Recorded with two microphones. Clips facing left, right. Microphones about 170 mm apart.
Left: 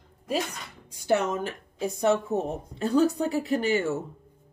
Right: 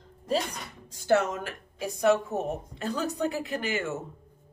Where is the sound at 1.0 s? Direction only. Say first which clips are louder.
Even; 20° left (ahead or behind).